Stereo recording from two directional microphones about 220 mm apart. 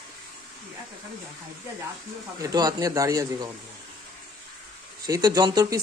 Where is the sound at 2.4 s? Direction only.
15° right (ahead or behind).